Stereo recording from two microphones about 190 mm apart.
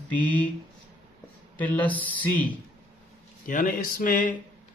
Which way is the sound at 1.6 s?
10° left (ahead or behind).